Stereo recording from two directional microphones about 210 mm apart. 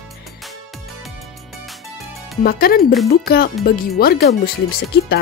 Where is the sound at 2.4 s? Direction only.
45° left (ahead or behind).